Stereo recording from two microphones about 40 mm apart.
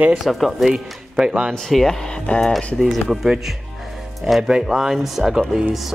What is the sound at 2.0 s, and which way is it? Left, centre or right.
Speech, left.